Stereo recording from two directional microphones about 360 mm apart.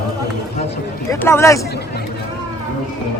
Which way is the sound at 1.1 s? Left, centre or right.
Centre.